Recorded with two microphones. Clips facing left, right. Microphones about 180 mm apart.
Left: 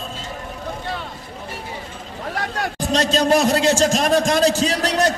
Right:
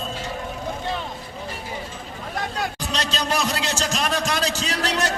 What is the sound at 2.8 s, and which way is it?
A man's voice, 45° left (ahead or behind).